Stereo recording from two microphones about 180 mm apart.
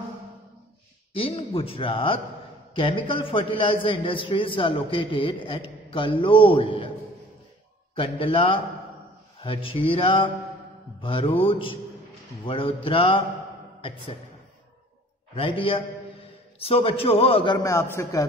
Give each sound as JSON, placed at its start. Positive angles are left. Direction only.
{"t": 1.1, "sound": "a man's voice", "side_deg": 30}
{"t": 7.9, "sound": "a man's voice", "side_deg": 30}
{"t": 15.3, "sound": "a man's voice", "side_deg": 30}
{"t": 17.6, "sound": "speech", "side_deg": 15}